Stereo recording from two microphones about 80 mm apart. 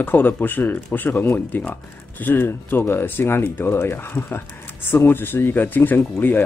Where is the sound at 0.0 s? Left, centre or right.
Left.